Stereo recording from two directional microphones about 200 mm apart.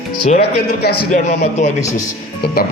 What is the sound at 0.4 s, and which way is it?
Speech, 55° left (ahead or behind).